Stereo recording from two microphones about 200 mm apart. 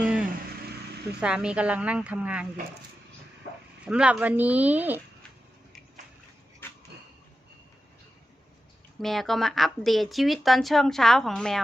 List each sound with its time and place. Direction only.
0.0 s vehicle: 5° right (ahead or behind)
1.2 s speech: 5° right (ahead or behind)
3.8 s speech: 5° right (ahead or behind)
9.0 s speech: centre (ahead or behind)